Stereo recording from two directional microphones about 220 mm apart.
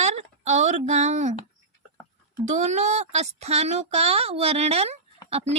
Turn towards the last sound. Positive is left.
turn(degrees=-30)  # may be behind; listen again after turning